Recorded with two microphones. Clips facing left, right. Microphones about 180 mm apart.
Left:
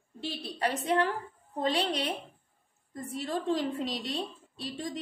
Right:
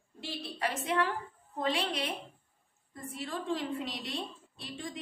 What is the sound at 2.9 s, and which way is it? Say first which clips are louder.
A woman's voice: left 5 dB; 40° left (ahead or behind).